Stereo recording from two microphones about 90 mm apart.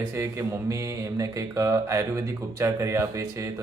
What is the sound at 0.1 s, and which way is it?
Mantra, 35° right (ahead or behind).